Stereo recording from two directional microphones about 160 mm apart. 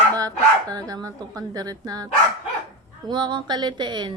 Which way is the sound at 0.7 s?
20° right (ahead or behind).